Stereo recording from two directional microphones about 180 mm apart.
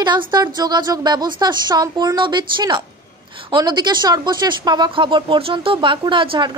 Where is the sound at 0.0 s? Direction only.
25° right (ahead or behind).